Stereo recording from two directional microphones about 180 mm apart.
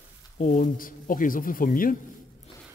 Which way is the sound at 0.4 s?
45° left (ahead or behind).